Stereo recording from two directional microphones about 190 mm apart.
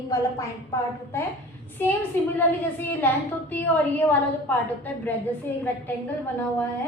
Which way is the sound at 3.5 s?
10° left (ahead or behind).